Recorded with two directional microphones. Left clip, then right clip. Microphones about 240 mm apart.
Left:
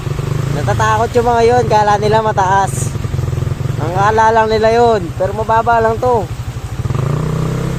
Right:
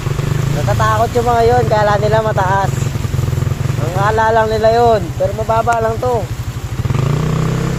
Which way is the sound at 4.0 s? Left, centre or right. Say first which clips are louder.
Left 2 dB; left.